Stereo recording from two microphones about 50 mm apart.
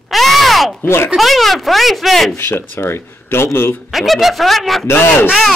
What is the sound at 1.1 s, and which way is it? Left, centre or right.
Speech, centre.